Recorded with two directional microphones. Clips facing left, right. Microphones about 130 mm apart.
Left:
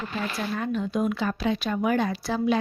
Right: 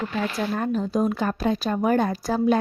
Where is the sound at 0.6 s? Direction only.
40° right (ahead or behind).